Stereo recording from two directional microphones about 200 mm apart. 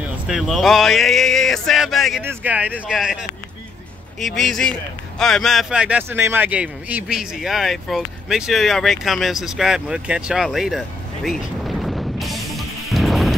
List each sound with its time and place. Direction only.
0.3 s speech: centre (ahead or behind)
11.2 s music: centre (ahead or behind)